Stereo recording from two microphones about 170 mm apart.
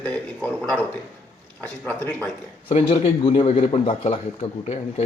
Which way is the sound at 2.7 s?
35° left (ahead or behind).